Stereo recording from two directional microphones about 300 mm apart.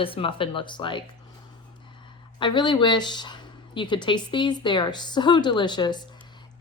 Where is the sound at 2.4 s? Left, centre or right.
Centre.